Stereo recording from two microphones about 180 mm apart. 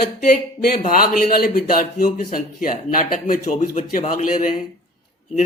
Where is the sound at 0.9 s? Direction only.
55° left (ahead or behind).